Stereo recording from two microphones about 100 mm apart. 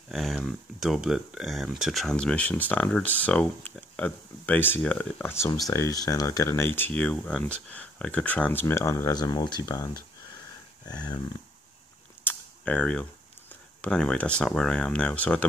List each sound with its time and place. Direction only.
0.1 s speech: centre (ahead or behind); by 5.5 s 25° left (ahead or behind)
5.7 s speech: 35° left (ahead or behind)
9.1 s speech: 40° left (ahead or behind)
10.9 s dog: 45° left (ahead or behind)
12.3 s mechanisms: 15° left (ahead or behind)
13.7 s speech: 10° left (ahead or behind)